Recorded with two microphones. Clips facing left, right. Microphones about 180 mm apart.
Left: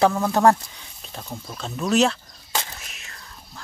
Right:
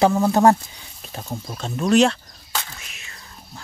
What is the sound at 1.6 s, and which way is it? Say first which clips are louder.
Speech: right 3 dB; centre (ahead or behind).